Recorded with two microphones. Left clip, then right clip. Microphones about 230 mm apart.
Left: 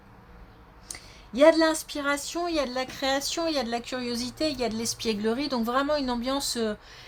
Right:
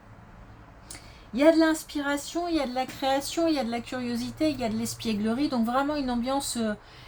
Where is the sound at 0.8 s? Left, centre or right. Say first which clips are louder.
Left 3 dB; left.